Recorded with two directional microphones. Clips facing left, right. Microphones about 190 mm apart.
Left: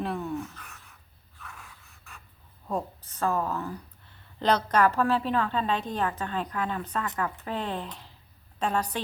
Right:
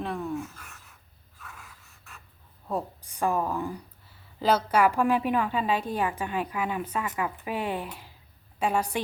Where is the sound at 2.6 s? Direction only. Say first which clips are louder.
Even; 10° right (ahead or behind).